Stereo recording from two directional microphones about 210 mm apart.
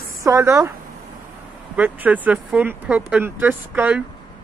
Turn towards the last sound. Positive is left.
turn(degrees=-10)  # may be behind; listen again after turning